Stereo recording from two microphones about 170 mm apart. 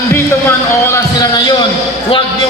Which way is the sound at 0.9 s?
20° left (ahead or behind).